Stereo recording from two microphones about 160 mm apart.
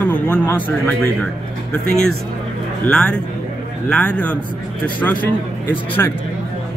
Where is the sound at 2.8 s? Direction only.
5° left (ahead or behind).